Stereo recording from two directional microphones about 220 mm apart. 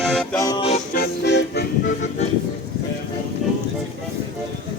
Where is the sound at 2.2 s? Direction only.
30° left (ahead or behind).